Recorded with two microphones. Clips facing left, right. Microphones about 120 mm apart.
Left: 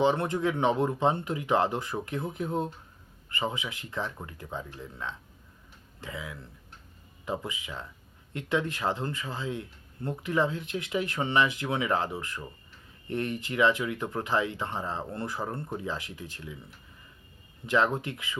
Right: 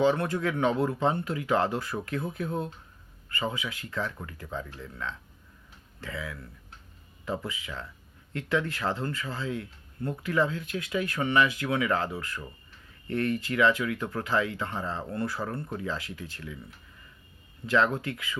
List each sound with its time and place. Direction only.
0.0 s speech: 25° left (ahead or behind)
17.7 s speech: 20° left (ahead or behind)